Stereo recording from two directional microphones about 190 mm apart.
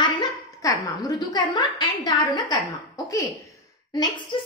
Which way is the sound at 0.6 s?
15° left (ahead or behind).